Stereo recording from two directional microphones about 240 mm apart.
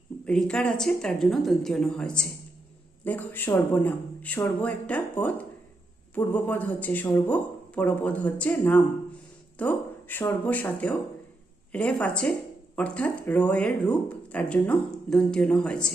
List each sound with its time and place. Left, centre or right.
0.3 s speech: centre